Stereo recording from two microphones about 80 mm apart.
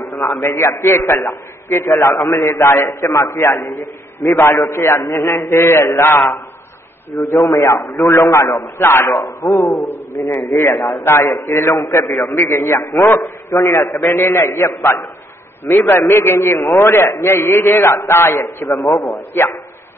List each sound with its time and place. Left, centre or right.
0.0 s a sound: left
0.4 s a man's voice: left
9.8 s a man's voice: left
10.7 s a man's voice: centre
11.0 s a man's voice: left